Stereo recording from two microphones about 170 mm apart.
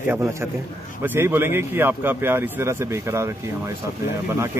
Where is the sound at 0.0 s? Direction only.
15° right (ahead or behind).